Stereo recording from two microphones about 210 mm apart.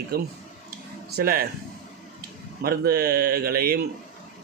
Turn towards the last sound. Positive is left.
turn(degrees=-45)  # may be behind; listen again after turning